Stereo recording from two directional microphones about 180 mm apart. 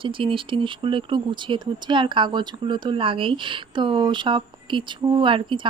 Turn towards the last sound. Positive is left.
turn(degrees=-25)  # may be behind; listen again after turning